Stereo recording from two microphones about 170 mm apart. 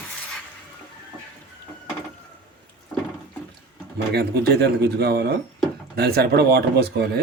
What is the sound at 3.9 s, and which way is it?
Speech, 70° right (ahead or behind).